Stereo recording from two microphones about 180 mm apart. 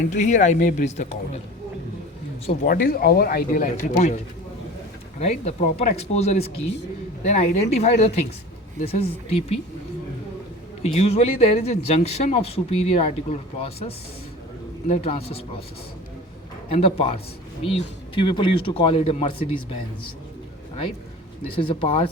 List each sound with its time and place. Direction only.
0.1 s a man's voice: 40° left (ahead or behind)
2.6 s speech: 55° left (ahead or behind)
3.9 s a man's voice: 40° left (ahead or behind)
5.2 s a man's voice: 40° left (ahead or behind)
10.8 s a man's voice: 35° left (ahead or behind)
16.6 s a man's voice: 35° left (ahead or behind)
21.5 s a man's voice: 30° left (ahead or behind)